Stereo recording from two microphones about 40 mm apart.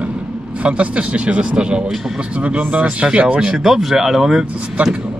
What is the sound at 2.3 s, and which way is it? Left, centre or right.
Speech, right.